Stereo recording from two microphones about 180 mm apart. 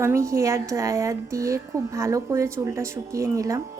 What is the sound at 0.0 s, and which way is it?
A woman's voice, 15° right (ahead or behind).